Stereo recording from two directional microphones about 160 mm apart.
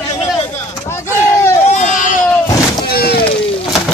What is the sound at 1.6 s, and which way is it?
Baby cry, 50° left (ahead or behind).